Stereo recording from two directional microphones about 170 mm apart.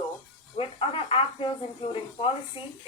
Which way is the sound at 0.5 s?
30° left (ahead or behind).